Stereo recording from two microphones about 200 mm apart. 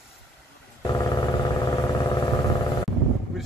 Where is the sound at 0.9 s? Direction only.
20° left (ahead or behind).